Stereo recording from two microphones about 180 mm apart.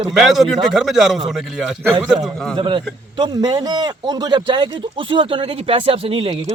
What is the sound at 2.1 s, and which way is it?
A man's voice, 25° right (ahead or behind).